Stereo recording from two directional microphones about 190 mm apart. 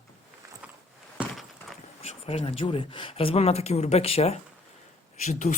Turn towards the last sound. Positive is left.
turn(degrees=40)  # may be behind; listen again after turning